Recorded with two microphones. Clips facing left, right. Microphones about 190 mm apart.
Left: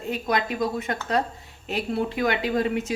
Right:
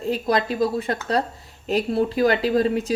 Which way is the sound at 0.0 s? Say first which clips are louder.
Right 4 dB; 35° right (ahead or behind).